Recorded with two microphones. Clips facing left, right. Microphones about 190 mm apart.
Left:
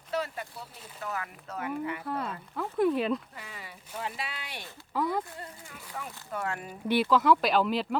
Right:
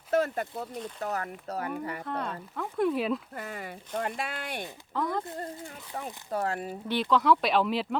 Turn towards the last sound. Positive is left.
turn(degrees=0)  # may be behind; listen again after turning